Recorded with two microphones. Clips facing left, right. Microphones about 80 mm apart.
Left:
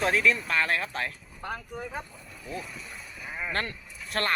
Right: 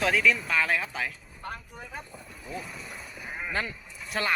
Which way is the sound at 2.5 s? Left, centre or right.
Centre.